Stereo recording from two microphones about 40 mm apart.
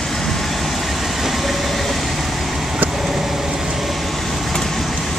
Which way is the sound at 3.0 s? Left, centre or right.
Centre.